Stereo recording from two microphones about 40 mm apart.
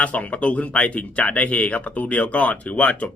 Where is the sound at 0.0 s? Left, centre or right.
Left.